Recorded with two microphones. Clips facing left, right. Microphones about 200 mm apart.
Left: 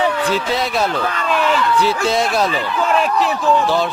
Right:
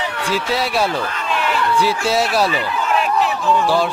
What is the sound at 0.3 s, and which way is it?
A man's voice, 10° right (ahead or behind).